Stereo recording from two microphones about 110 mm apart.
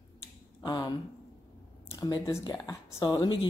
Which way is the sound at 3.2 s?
45° left (ahead or behind).